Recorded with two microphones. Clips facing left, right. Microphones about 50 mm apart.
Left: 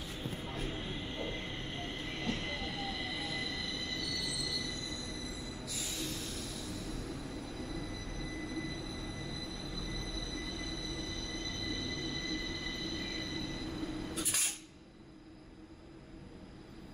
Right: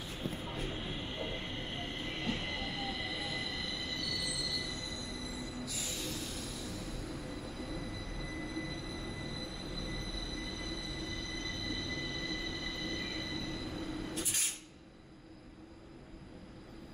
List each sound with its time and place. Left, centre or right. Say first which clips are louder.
0.4 s train: even; centre